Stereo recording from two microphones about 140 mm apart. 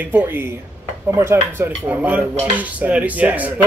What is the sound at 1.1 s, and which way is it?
Speech, 15° right (ahead or behind).